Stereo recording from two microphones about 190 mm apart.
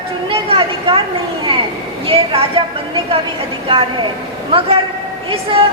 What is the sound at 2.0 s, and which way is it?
Speech, 30° right (ahead or behind).